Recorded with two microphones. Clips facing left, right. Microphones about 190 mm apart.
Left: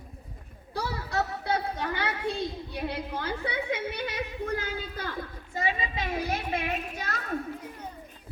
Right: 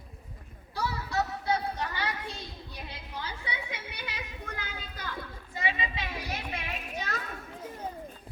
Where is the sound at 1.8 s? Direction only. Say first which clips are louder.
Left 4 dB; 55° left (ahead or behind).